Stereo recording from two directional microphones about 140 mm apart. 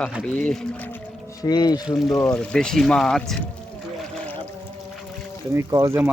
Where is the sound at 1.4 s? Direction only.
30° left (ahead or behind).